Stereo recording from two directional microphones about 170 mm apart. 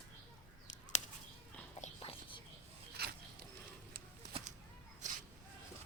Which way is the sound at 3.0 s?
70° right (ahead or behind).